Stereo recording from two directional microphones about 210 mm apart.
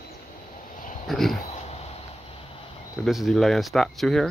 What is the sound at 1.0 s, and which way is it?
Speech, centre (ahead or behind).